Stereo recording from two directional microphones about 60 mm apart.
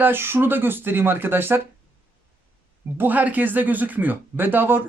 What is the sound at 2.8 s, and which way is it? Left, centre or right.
Speech, right.